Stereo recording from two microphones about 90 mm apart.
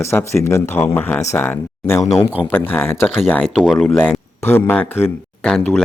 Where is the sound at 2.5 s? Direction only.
20° left (ahead or behind).